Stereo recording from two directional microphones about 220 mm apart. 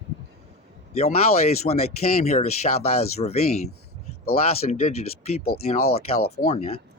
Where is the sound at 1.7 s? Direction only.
35° left (ahead or behind).